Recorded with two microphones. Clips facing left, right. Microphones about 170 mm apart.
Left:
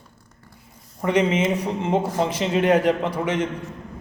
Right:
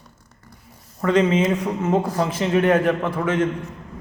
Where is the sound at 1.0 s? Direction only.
15° left (ahead or behind).